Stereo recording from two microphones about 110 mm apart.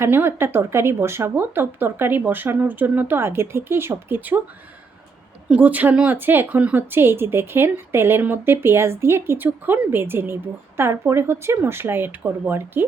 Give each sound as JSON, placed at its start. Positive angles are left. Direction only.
{"t": 0.0, "sound": "a woman's voice", "side_deg": -20}
{"t": 5.5, "sound": "a woman's voice", "side_deg": -15}